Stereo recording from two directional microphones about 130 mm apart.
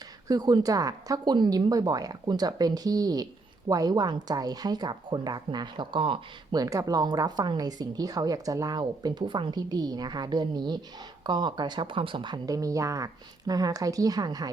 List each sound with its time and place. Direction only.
0.3 s a woman's voice: 30° right (ahead or behind)
6.6 s a woman's voice: 25° right (ahead or behind)